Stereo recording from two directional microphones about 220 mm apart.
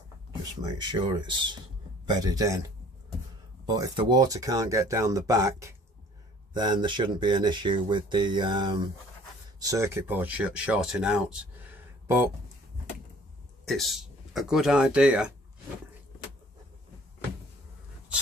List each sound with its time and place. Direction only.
0.6 s speech: 20° right (ahead or behind)
13.7 s speech: centre (ahead or behind)